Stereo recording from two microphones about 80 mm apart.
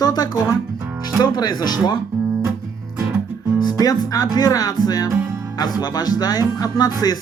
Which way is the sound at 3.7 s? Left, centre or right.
Left.